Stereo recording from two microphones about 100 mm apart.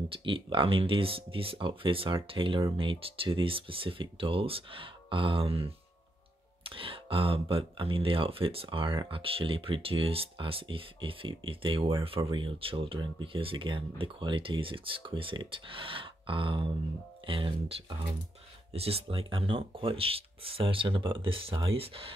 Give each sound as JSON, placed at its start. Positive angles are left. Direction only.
{"t": 0.1, "sound": "speech", "side_deg": -60}
{"t": 18.7, "sound": "speech", "side_deg": -80}